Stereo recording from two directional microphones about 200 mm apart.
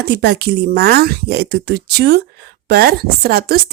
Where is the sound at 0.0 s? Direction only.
55° right (ahead or behind).